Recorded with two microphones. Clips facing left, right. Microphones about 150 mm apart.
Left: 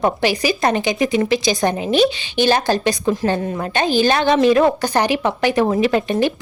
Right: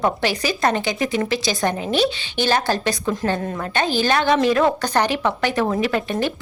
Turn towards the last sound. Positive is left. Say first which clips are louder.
# left 5 dB
turn(degrees=20)  # may be behind; listen again after turning